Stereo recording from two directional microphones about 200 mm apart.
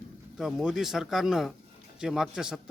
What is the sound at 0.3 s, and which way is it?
A man's voice, centre (ahead or behind).